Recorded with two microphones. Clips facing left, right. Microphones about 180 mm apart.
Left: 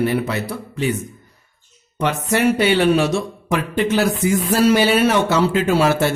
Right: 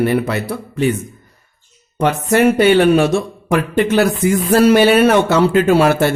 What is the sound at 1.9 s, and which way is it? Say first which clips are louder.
Speech: right 5 dB; 50° right (ahead or behind).